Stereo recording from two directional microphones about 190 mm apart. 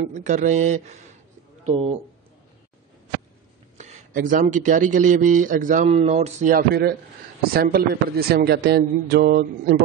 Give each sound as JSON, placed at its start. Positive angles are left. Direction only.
{"t": 0.0, "sound": "a man's voice", "side_deg": -40}
{"t": 3.7, "sound": "speech", "side_deg": -40}